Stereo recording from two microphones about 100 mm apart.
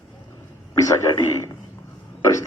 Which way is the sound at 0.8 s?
35° left (ahead or behind).